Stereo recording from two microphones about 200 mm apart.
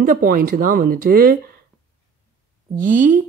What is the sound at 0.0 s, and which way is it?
Speech, 45° right (ahead or behind).